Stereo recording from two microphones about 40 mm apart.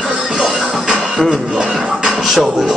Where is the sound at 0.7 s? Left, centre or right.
Centre.